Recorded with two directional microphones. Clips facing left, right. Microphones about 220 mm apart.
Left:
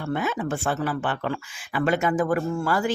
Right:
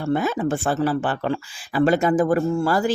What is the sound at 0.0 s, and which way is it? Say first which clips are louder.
Speech: right 5 dB; 35° right (ahead or behind).